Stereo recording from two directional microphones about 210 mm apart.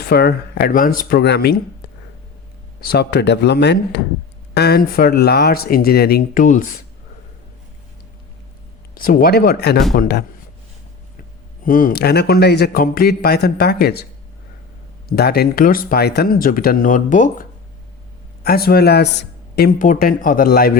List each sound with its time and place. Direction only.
0.1 s a man's voice: 50° left (ahead or behind)
2.8 s a man's voice: 50° left (ahead or behind)
9.0 s a man's voice: 40° left (ahead or behind)
11.6 s a man's voice: 40° left (ahead or behind)
15.1 s a man's voice: 50° left (ahead or behind)
18.4 s a man's voice: 45° left (ahead or behind)